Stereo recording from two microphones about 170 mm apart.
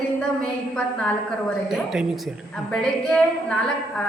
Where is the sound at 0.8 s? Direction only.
5° left (ahead or behind).